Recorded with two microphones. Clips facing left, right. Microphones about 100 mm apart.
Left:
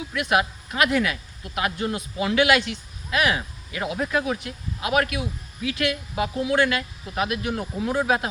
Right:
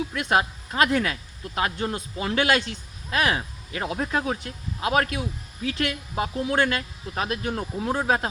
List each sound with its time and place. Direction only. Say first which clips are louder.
0.1 s speech: left 4 dB; 35° right (ahead or behind)